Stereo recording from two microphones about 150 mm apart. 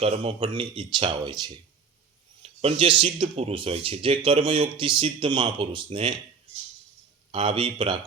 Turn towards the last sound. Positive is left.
turn(degrees=-35)  # may be behind; listen again after turning